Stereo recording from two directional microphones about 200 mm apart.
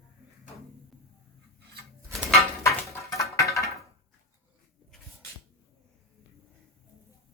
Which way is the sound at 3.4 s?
15° left (ahead or behind).